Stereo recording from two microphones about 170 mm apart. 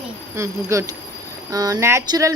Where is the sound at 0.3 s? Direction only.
15° right (ahead or behind).